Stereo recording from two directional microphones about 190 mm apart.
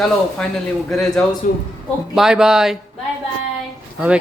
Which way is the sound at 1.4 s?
45° left (ahead or behind).